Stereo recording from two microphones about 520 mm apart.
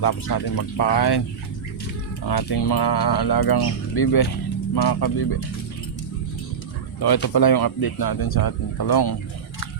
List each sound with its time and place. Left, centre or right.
0.0 s speech: left
2.2 s speech: left
7.0 s speech: left